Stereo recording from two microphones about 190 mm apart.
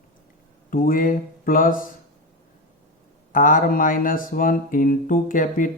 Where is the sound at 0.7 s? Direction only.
45° left (ahead or behind).